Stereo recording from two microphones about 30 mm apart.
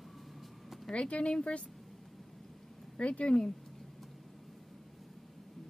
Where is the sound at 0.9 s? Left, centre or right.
Left.